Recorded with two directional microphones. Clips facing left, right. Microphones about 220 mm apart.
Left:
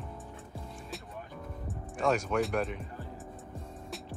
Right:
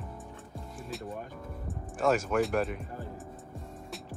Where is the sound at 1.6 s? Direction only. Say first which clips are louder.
Right 2 dB; 5° right (ahead or behind).